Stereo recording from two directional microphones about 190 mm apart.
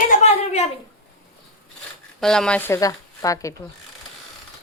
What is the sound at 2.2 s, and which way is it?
Speech, 5° left (ahead or behind).